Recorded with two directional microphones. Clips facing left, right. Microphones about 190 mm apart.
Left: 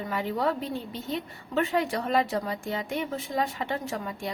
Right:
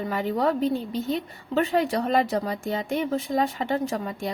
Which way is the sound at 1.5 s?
35° right (ahead or behind).